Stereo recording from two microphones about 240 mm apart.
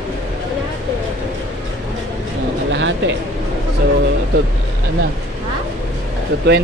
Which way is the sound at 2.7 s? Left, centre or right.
Right.